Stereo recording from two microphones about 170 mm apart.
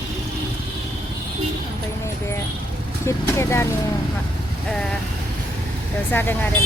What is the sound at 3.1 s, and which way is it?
Speech, 15° left (ahead or behind).